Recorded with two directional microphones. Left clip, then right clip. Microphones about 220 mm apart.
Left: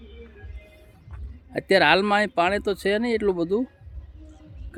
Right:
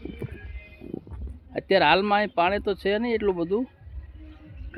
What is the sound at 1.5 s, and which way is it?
Speech, 25° left (ahead or behind).